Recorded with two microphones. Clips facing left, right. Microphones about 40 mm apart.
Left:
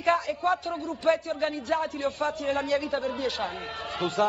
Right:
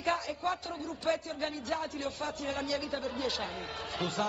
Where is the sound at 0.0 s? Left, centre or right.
Left.